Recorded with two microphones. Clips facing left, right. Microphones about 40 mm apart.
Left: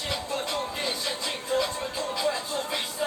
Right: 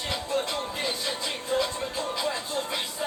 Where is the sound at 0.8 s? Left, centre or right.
Centre.